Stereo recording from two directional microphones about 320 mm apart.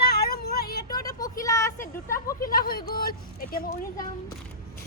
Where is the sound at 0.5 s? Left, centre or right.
Left.